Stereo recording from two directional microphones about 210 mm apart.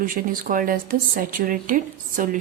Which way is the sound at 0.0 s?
40° right (ahead or behind).